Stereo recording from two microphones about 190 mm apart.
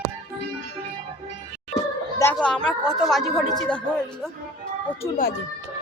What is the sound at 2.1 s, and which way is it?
A woman's voice, 10° left (ahead or behind).